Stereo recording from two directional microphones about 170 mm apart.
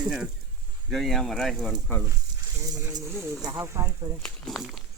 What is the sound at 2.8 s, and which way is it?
Speech, 15° right (ahead or behind).